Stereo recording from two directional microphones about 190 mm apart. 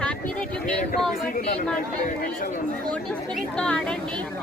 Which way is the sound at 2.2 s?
50° left (ahead or behind).